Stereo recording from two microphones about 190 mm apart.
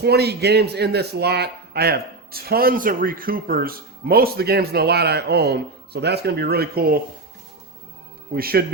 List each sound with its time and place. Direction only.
0.0 s speech: 60° right (ahead or behind)
8.3 s speech: 55° right (ahead or behind)